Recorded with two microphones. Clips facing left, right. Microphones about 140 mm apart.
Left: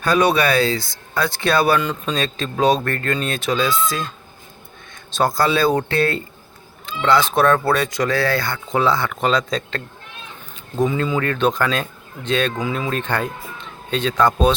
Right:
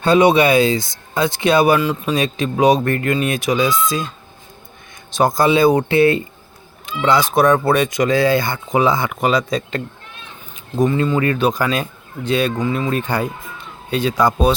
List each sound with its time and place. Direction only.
0.0 s speech: 25° right (ahead or behind)
1.8 s speech: 5° right (ahead or behind)
5.1 s speech: 20° right (ahead or behind)
10.8 s speech: centre (ahead or behind)
12.5 s speech: 5° left (ahead or behind)